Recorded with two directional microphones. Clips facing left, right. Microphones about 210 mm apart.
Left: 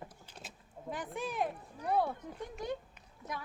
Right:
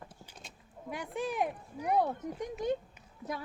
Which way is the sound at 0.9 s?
15° right (ahead or behind).